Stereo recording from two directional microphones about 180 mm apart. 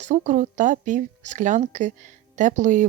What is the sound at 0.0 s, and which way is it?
Speech, 45° right (ahead or behind).